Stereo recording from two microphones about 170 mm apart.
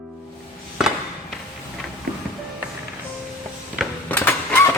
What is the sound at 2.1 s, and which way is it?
Music, 60° right (ahead or behind).